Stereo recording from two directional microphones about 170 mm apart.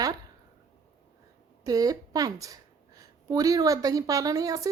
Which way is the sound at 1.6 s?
20° right (ahead or behind).